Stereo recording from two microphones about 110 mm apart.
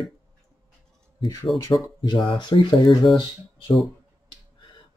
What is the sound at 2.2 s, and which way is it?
Speech, 50° left (ahead or behind).